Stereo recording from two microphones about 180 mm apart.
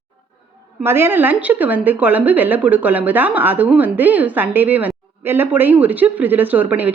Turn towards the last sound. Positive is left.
turn(degrees=-10)  # may be behind; listen again after turning